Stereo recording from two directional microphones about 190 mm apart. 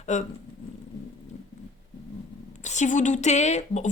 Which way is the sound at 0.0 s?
40° left (ahead or behind).